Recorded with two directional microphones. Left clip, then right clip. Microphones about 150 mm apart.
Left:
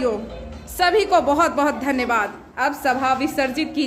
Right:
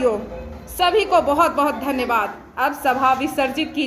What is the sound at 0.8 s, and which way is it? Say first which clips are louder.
A woman's voice: even; 30° left (ahead or behind).